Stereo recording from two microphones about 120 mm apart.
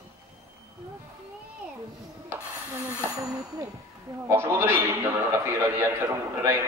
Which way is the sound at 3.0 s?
30° right (ahead or behind).